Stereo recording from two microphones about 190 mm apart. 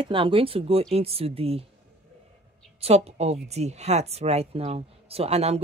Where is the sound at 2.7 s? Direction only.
35° right (ahead or behind).